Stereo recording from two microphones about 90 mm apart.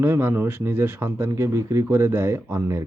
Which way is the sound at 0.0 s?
25° right (ahead or behind).